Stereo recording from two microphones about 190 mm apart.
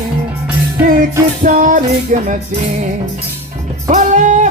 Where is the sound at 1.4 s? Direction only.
45° right (ahead or behind).